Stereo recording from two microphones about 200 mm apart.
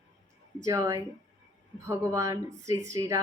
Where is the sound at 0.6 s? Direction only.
15° right (ahead or behind).